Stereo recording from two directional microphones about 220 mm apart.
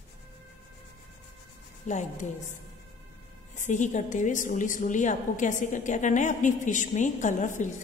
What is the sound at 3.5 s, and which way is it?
A woman's voice, 35° left (ahead or behind).